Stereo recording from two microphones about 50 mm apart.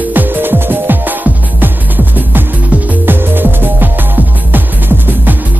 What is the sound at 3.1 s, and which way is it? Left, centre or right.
Music, right.